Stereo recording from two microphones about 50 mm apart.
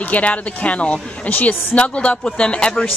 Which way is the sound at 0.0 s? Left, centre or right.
Left.